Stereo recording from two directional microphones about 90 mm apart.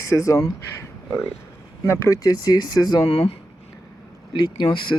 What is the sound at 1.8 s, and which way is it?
Speech, 30° left (ahead or behind).